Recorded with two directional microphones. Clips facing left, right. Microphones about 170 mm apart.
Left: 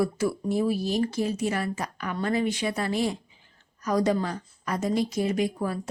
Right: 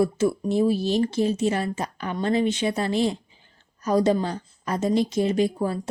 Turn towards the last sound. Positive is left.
turn(degrees=-25)  # may be behind; listen again after turning